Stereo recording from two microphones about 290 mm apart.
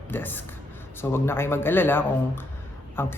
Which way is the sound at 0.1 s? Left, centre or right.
Centre.